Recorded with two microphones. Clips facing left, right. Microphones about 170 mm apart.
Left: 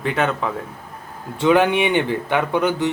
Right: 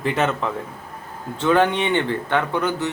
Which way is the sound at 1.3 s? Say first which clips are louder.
Left 2 dB; 15° left (ahead or behind).